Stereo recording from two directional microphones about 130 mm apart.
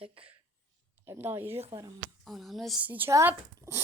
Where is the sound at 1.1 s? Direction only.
15° right (ahead or behind).